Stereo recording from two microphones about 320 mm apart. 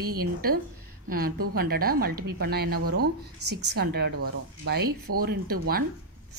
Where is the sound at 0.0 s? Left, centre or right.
Right.